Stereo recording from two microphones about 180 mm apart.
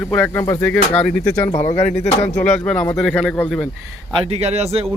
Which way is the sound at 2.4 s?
5° left (ahead or behind).